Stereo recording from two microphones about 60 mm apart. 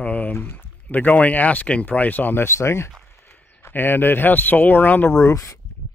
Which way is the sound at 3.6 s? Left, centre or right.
Left.